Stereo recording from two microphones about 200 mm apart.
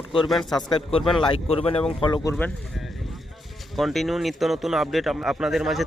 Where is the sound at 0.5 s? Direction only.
25° left (ahead or behind).